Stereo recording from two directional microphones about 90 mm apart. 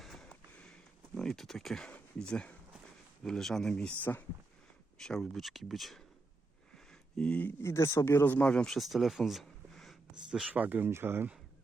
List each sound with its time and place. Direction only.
0.0 s a sound: 5° left (ahead or behind)
1.9 s speech: 10° left (ahead or behind)
4.0 s speech: 20° left (ahead or behind)
4.9 s speech: 5° left (ahead or behind)
7.2 s speech: 15° left (ahead or behind)
7.4 s speech: 30° left (ahead or behind); by 8.7 s 15° left (ahead or behind)
8.7 s speech: centre (ahead or behind)
10.5 s speech: 20° right (ahead or behind)